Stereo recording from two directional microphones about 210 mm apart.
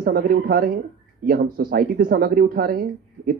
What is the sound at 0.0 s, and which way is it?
Speech, 45° right (ahead or behind).